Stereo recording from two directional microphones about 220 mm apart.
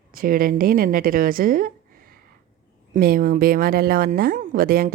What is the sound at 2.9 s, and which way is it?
A woman's voice, 40° right (ahead or behind).